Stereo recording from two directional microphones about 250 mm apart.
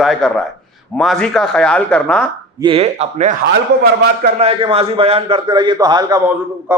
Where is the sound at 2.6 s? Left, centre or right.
Right.